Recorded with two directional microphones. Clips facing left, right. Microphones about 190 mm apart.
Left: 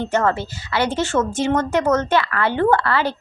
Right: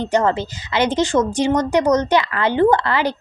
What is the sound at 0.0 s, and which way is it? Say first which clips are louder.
A woman's voice: right 2 dB; 15° right (ahead or behind).